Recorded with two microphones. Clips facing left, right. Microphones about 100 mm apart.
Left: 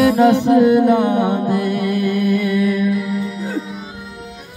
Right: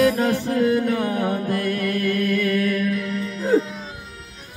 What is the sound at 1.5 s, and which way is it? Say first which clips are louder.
Music: left 5 dB; 10° left (ahead or behind).